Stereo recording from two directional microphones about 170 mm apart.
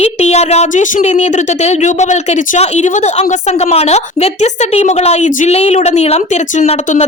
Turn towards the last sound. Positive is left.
turn(degrees=40)  # may be behind; listen again after turning